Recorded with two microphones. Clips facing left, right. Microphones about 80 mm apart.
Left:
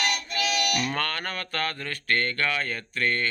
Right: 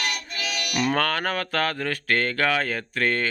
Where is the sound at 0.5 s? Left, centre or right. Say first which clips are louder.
Right 2 dB; right.